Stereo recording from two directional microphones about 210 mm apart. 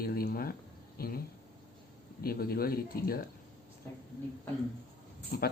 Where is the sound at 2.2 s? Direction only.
45° left (ahead or behind).